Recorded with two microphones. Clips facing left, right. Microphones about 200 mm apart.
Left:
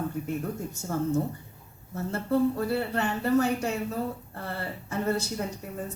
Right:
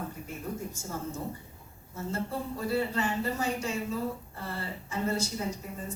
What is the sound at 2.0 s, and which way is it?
A woman's voice, 65° left (ahead or behind).